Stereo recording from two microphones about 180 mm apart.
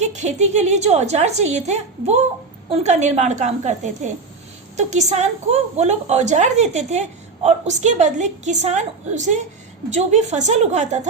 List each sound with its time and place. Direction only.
0.0 s a woman's voice: 40° right (ahead or behind)